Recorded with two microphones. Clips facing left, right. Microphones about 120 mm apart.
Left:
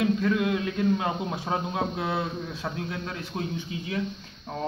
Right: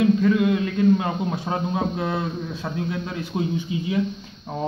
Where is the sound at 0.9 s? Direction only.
Centre (ahead or behind).